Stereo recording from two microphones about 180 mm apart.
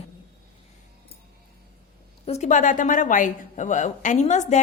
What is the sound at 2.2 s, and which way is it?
A woman's voice, 40° left (ahead or behind).